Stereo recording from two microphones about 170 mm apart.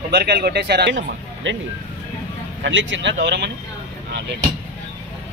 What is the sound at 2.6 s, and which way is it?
Speech, 90° right.